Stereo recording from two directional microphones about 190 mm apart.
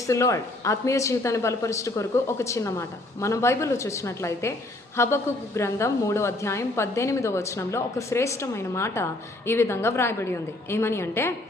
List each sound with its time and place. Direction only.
0.1 s a woman's voice: 15° left (ahead or behind)